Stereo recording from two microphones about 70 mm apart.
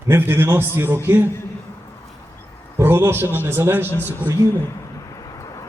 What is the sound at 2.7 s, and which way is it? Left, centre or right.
A man's voice, right.